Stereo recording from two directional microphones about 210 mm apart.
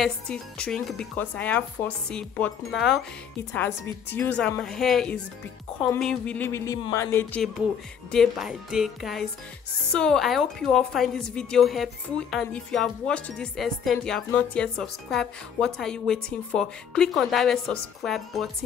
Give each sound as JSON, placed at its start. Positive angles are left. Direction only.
{"t": 0.0, "sound": "a woman's voice", "side_deg": 5}
{"t": 5.9, "sound": "music", "side_deg": 5}
{"t": 8.1, "sound": "a woman's voice", "side_deg": 0}